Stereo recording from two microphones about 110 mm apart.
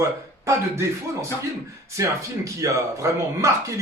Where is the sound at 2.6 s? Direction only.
30° right (ahead or behind).